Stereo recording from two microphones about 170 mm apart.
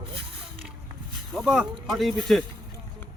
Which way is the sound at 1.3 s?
Centre (ahead or behind).